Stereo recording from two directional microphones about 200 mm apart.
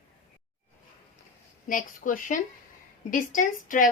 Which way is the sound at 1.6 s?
40° left (ahead or behind).